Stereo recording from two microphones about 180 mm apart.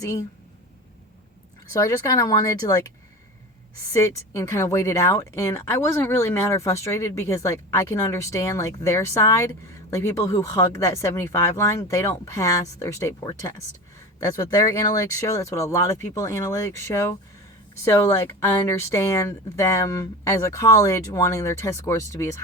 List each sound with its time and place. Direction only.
0.0 s speech: 20° left (ahead or behind)
1.7 s speech: 20° left (ahead or behind)
3.9 s speech: 15° left (ahead or behind)